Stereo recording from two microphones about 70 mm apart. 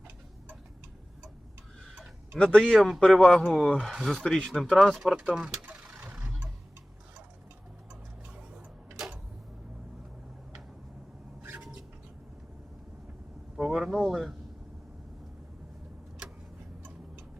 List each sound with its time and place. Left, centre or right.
1.8 s tick-tock: centre
2.4 s speech: centre
2.7 s speech: centre
3.1 s speech: centre
4.2 s speech: centre
5.6 s vehicle: right
13.6 s a sound: centre